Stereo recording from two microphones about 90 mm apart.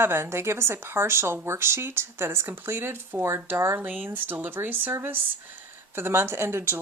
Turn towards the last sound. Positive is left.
turn(degrees=-25)  # may be behind; listen again after turning